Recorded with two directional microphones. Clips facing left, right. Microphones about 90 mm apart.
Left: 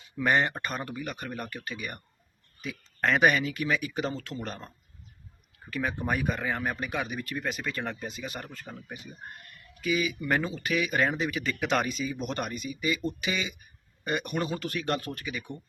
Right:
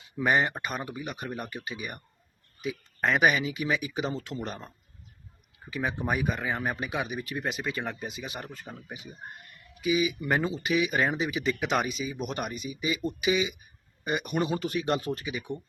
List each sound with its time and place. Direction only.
0.2 s speech: 10° right (ahead or behind)
4.1 s speech: 20° right (ahead or behind)
5.7 s speech: 10° right (ahead or behind)